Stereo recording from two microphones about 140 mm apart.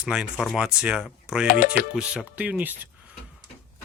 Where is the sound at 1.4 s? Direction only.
75° left (ahead or behind).